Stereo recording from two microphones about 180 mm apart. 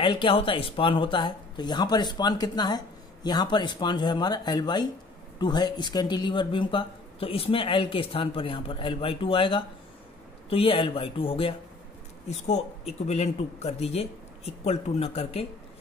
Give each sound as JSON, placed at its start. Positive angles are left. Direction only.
{"t": 0.0, "sound": "speech", "side_deg": 25}